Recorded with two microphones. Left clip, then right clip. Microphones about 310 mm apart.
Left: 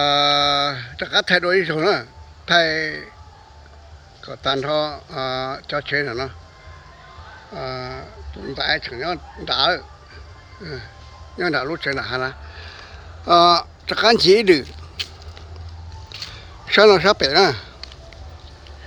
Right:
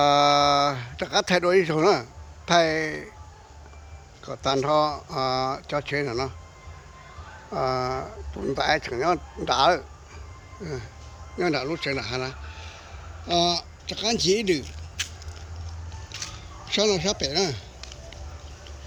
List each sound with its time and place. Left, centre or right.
0.0 s a sound: centre
2.5 s speech: centre
4.3 s speech: centre
7.6 s speech: right
8.4 s speech: centre
16.1 s a sound: centre